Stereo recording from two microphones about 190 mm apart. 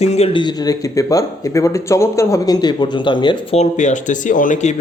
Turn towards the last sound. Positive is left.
turn(degrees=40)  # may be behind; listen again after turning